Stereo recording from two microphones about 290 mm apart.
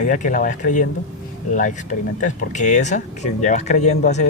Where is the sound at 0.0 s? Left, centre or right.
Left.